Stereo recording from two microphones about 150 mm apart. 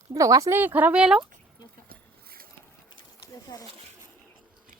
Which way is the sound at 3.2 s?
20° left (ahead or behind).